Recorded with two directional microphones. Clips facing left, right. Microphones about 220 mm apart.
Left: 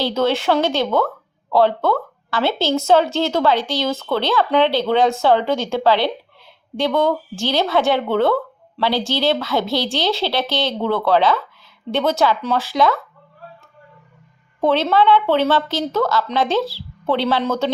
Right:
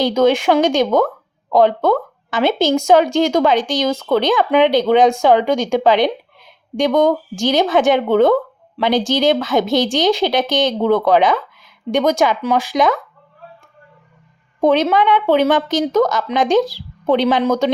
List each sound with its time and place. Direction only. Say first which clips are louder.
0.0 s speech: right 5 dB; 15° right (ahead or behind)
14.6 s speech: right 2 dB; 15° right (ahead or behind)